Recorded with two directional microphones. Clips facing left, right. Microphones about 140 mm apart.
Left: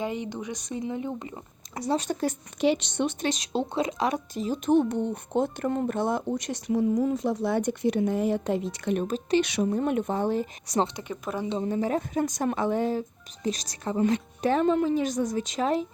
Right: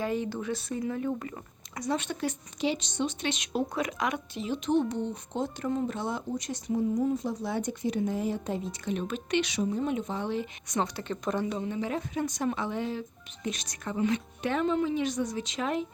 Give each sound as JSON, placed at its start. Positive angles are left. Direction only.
{"t": 0.0, "sound": "speech", "side_deg": 20}
{"t": 1.7, "sound": "speech", "side_deg": 30}
{"t": 3.2, "sound": "a woman's voice", "side_deg": 35}
{"t": 9.0, "sound": "speech", "side_deg": 35}
{"t": 9.4, "sound": "speech", "side_deg": 60}
{"t": 10.9, "sound": "speech", "side_deg": 10}
{"t": 11.6, "sound": "speech", "side_deg": 40}